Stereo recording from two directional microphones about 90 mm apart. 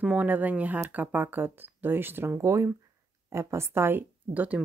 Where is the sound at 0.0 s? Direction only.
15° right (ahead or behind).